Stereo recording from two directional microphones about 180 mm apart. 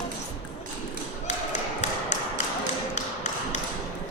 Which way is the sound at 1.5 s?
40° left (ahead or behind).